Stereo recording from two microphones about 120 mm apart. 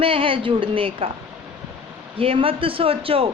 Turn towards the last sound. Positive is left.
turn(degrees=-50)  # may be behind; listen again after turning